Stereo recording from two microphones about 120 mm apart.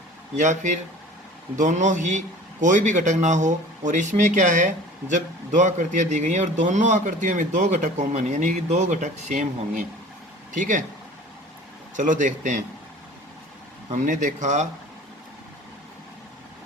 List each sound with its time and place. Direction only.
0.3 s a man's voice: 90° right
11.9 s a man's voice: 90° right
13.9 s speech: 90° right